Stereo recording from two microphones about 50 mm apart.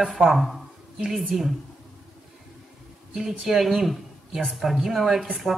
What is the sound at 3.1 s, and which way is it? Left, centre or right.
Speech, centre.